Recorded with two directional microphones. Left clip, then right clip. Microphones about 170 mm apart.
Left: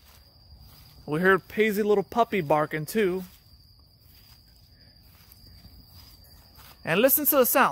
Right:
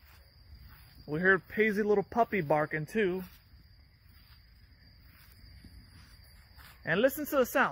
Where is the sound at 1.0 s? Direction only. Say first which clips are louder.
Left 5 dB; 35° left (ahead or behind).